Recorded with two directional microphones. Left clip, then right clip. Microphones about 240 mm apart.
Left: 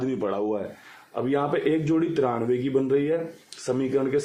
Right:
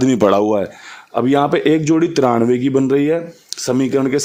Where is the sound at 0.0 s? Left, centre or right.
Right.